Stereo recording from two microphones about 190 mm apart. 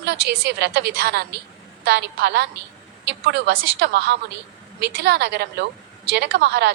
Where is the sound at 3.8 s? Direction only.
60° right (ahead or behind).